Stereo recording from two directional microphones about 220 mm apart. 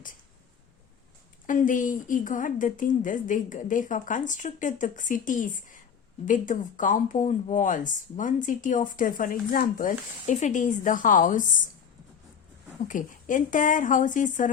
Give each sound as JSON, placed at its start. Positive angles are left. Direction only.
{"t": 1.5, "sound": "speech", "side_deg": 35}
{"t": 12.9, "sound": "speech", "side_deg": 35}